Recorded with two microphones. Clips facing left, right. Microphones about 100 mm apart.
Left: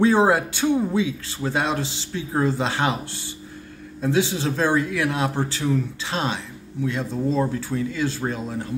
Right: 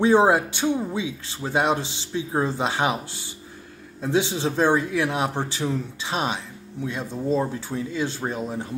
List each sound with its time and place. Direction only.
0.0 s speech: 20° right (ahead or behind)
4.0 s speech: 20° right (ahead or behind)